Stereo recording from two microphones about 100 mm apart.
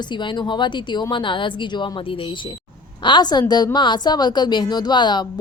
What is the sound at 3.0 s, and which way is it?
A woman's voice, 50° left (ahead or behind).